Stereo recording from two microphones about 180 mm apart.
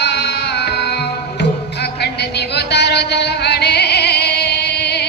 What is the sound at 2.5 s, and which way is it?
Music, 70° left (ahead or behind).